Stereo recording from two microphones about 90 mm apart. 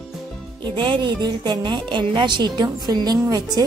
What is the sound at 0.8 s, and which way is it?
A woman's voice, 60° right (ahead or behind).